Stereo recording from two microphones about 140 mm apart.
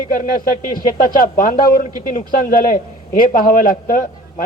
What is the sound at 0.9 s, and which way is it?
Speech, 75° left (ahead or behind).